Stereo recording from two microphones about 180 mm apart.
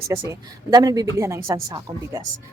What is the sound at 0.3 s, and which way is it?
Speech, 20° right (ahead or behind).